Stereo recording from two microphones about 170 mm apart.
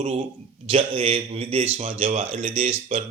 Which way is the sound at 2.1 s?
50° right (ahead or behind).